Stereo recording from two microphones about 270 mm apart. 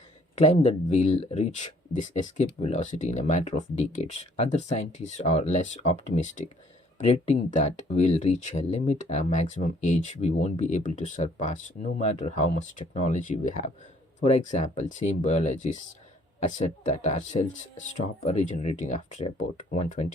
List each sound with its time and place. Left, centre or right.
0.3 s speech: left
7.5 s speech: left